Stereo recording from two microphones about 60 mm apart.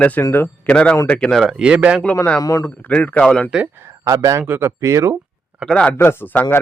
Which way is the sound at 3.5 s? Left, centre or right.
Centre.